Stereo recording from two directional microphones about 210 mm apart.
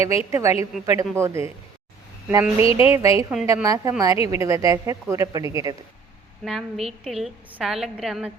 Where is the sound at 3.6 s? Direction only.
15° right (ahead or behind).